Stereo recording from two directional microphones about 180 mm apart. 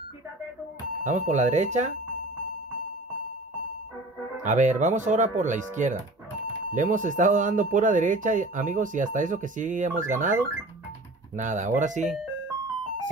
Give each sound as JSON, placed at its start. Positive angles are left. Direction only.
{"t": 1.0, "sound": "speech", "side_deg": -40}
{"t": 4.4, "sound": "speech", "side_deg": -45}